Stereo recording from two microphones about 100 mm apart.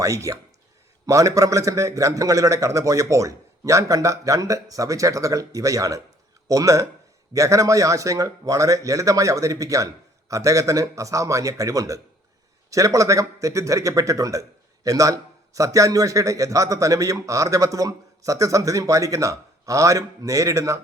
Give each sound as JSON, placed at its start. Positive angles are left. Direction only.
{"t": 0.0, "sound": "a man's voice", "side_deg": -35}